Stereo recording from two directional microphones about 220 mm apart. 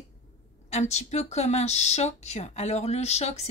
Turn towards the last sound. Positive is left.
turn(degrees=30)  # may be behind; listen again after turning